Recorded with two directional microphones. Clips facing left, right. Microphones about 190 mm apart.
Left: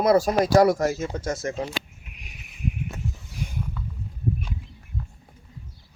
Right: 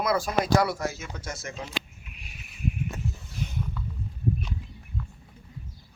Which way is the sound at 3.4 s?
10° left (ahead or behind).